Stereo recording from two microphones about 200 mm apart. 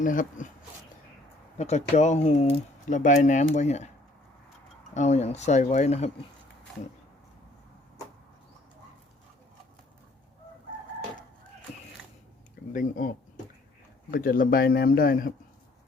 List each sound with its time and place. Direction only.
0.0 s speech: 40° left (ahead or behind)
1.5 s speech: 35° left (ahead or behind)
4.9 s speech: 35° left (ahead or behind)
12.7 s speech: 40° left (ahead or behind)
14.1 s a man's voice: 45° left (ahead or behind)